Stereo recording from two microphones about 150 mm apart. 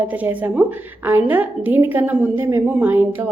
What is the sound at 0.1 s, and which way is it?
A woman's voice, 10° right (ahead or behind).